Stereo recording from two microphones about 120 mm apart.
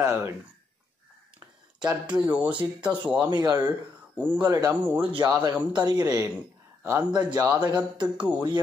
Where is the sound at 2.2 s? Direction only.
10° right (ahead or behind).